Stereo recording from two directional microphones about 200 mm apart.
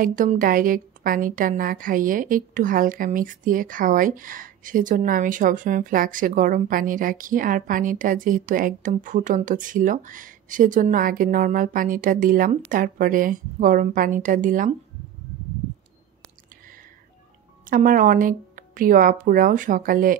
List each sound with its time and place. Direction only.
0.0 s a woman's voice: 40° right (ahead or behind)
17.6 s a woman's voice: 45° right (ahead or behind)